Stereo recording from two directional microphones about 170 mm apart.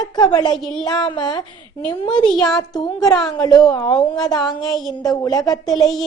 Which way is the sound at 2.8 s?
20° left (ahead or behind).